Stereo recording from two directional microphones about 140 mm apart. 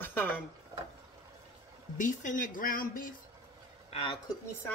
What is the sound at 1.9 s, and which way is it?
Speech, 70° left (ahead or behind).